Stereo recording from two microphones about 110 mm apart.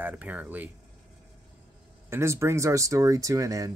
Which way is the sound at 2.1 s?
25° right (ahead or behind).